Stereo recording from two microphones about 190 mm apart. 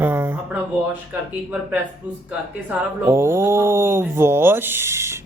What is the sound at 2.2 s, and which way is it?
Speech, 10° right (ahead or behind).